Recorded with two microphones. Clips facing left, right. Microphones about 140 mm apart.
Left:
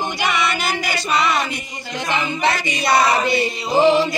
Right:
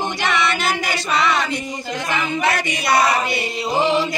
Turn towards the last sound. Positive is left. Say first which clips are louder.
# left 4 dB
turn(degrees=30)  # may be behind; listen again after turning